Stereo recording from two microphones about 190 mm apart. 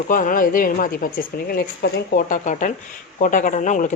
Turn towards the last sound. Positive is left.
turn(degrees=40)  # may be behind; listen again after turning